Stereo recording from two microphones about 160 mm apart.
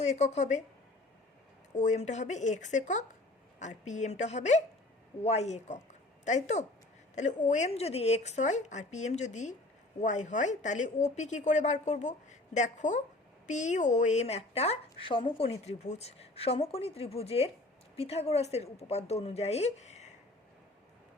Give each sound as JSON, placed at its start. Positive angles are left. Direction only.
{"t": 0.0, "sound": "a woman's voice", "side_deg": 45}
{"t": 1.7, "sound": "a woman's voice", "side_deg": 45}